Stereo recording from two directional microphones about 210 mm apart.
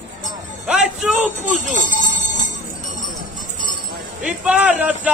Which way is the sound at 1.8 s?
40° left (ahead or behind).